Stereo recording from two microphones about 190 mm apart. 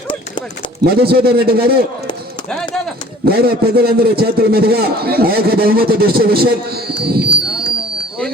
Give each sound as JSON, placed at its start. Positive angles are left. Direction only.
{"t": 0.9, "sound": "a man's voice", "side_deg": -55}
{"t": 3.2, "sound": "a man's voice", "side_deg": -55}